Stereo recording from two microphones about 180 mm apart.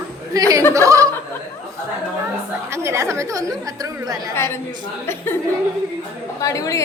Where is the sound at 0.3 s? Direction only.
20° right (ahead or behind).